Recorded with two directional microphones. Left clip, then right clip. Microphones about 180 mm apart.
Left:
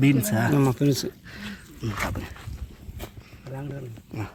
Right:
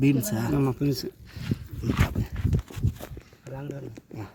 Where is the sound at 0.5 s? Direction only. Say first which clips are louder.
Left 2 dB; 20° left (ahead or behind).